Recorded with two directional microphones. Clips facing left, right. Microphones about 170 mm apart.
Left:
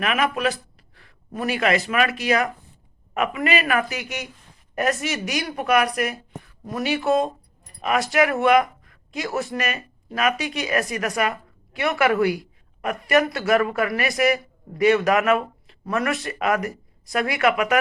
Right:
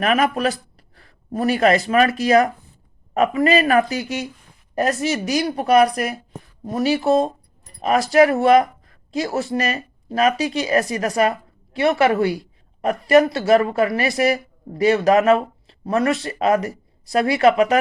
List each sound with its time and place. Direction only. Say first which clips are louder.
0.0 s a woman's voice: right 4 dB; 40° right (ahead or behind)